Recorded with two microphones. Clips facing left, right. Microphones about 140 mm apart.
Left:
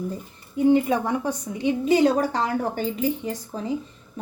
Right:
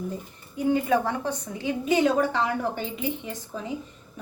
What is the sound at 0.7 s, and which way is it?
A woman's voice, 20° left (ahead or behind).